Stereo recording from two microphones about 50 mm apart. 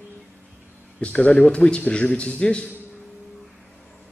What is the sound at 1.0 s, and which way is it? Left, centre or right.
A man's voice, left.